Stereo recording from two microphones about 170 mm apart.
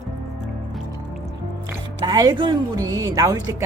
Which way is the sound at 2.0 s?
25° right (ahead or behind).